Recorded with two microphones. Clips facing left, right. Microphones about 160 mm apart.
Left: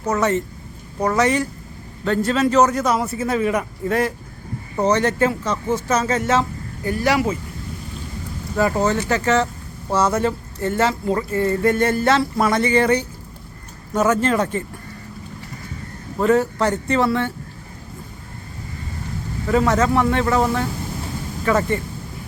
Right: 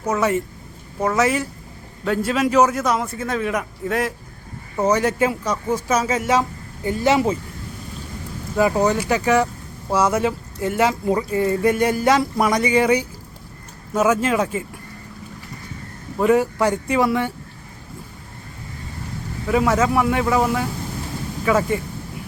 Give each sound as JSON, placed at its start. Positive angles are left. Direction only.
{"t": 0.0, "sound": "a man's voice", "side_deg": -10}
{"t": 6.8, "sound": "speech", "side_deg": -20}
{"t": 8.5, "sound": "speech", "side_deg": -15}
{"t": 16.2, "sound": "speech", "side_deg": -10}
{"t": 19.5, "sound": "speech", "side_deg": -5}